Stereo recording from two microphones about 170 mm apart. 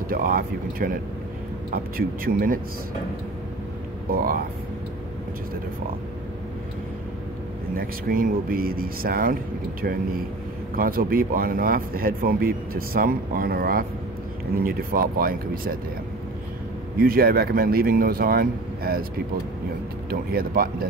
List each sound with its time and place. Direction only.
0.1 s speech: 55° right (ahead or behind)
4.1 s speech: 55° right (ahead or behind)
7.7 s speech: 55° right (ahead or behind)
17.0 s speech: 60° right (ahead or behind)
20.1 s speech: 60° right (ahead or behind)